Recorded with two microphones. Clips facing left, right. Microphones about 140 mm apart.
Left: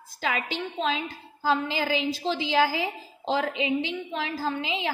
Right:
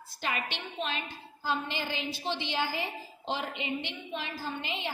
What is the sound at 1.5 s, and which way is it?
A woman's voice, 90° left.